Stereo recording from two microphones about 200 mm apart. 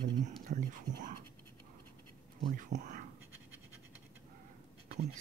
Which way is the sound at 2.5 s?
40° right (ahead or behind).